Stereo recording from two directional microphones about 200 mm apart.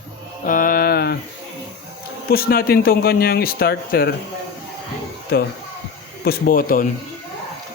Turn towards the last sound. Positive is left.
turn(degrees=45)  # may be behind; listen again after turning